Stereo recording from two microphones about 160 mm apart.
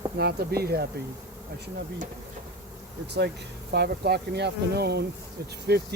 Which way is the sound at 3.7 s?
90° right.